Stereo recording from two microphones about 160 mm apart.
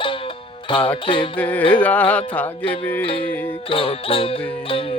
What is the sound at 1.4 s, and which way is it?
Speech, 10° left (ahead or behind).